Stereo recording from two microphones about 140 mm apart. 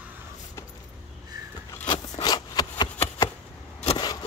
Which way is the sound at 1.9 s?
30° left (ahead or behind).